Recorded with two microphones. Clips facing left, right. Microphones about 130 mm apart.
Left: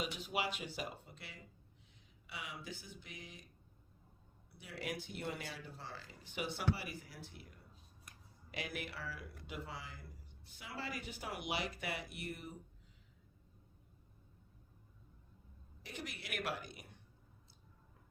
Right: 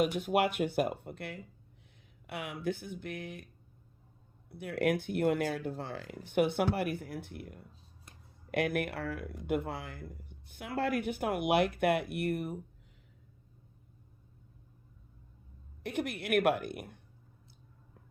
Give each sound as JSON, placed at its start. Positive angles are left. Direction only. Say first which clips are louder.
{"t": 0.0, "sound": "speech", "louder": "right 12 dB", "side_deg": -55}
{"t": 4.4, "sound": "speech", "louder": "right 14 dB", "side_deg": -55}
{"t": 15.8, "sound": "speech", "louder": "right 13 dB", "side_deg": -60}